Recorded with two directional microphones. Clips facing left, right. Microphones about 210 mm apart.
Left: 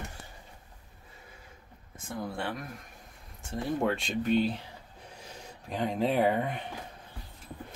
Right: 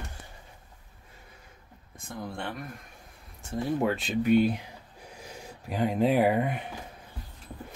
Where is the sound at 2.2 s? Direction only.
Centre (ahead or behind).